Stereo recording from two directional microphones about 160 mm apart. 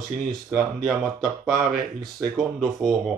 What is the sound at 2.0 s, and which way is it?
Speech, 20° right (ahead or behind).